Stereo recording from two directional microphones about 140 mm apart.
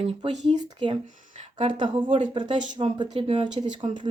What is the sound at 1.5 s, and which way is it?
Speech, 35° right (ahead or behind).